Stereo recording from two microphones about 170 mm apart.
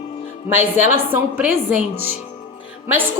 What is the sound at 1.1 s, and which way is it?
A woman's voice, 10° right (ahead or behind).